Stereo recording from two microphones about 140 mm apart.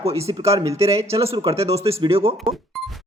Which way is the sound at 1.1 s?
45° right (ahead or behind).